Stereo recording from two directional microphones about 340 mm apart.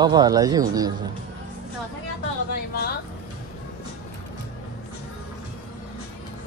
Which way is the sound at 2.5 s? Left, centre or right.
Left.